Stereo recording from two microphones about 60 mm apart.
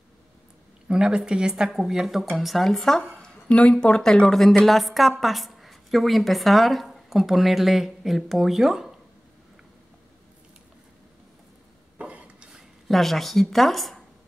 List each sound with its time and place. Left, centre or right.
0.8 s speech: centre
3.2 s a woman's voice: centre
12.0 s rub: centre
12.5 s speech: centre